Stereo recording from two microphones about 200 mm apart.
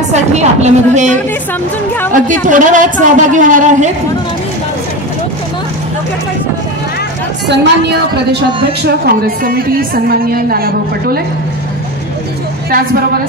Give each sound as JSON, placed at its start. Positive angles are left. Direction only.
{"t": 0.1, "sound": "a woman's voice", "side_deg": -35}
{"t": 7.4, "sound": "a woman's voice", "side_deg": -60}
{"t": 9.0, "sound": "a woman's voice", "side_deg": -45}